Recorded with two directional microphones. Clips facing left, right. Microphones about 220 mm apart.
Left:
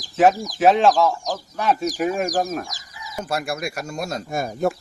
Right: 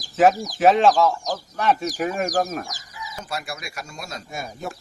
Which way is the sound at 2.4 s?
5° left (ahead or behind).